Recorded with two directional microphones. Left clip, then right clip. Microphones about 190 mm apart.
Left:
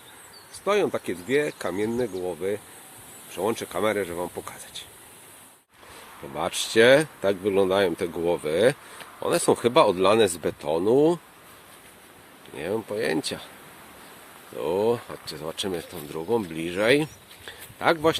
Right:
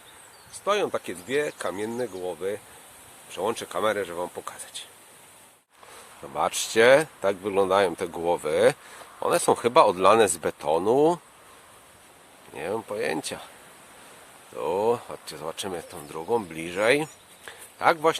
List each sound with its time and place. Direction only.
0.6 s speech: 5° right (ahead or behind)
6.3 s speech: 10° right (ahead or behind)
12.5 s speech: 10° right (ahead or behind)
14.6 s speech: 10° right (ahead or behind)